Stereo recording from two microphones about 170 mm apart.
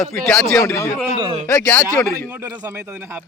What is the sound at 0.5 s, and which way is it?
Speech, 15° left (ahead or behind).